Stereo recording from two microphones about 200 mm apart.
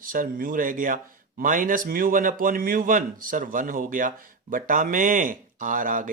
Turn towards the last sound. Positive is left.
turn(degrees=-40)  # may be behind; listen again after turning